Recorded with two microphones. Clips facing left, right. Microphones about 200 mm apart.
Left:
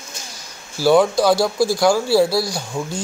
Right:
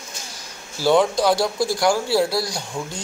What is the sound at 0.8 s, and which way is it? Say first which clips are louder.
Speech: left 3 dB; 10° left (ahead or behind).